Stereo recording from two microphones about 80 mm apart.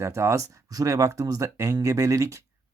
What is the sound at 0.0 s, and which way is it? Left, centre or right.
Speech, right.